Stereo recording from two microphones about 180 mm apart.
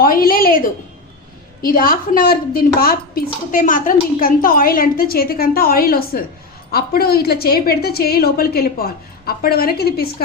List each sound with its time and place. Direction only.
0.0 s a woman's voice: 55° left (ahead or behind)